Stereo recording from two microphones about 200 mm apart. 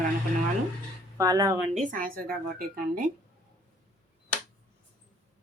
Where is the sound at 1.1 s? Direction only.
15° right (ahead or behind).